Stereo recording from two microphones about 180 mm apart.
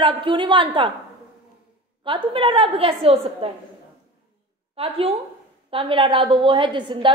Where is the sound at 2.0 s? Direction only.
30° right (ahead or behind).